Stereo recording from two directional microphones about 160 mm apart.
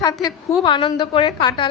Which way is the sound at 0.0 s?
25° left (ahead or behind).